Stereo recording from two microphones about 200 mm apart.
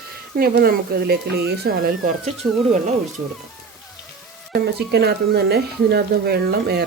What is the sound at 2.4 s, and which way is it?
Speech, 25° right (ahead or behind).